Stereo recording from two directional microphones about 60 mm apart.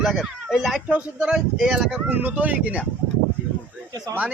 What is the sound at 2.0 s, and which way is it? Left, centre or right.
Speech, right.